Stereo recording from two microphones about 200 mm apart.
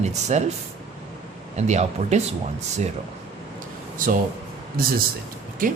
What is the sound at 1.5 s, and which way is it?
Speech, 35° right (ahead or behind).